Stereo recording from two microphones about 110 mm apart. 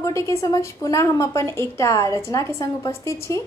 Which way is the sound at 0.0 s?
30° left (ahead or behind).